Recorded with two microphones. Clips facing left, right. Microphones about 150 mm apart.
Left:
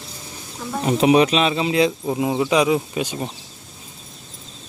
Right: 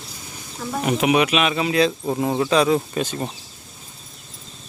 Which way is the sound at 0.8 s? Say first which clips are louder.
Left 4 dB; 30° left (ahead or behind).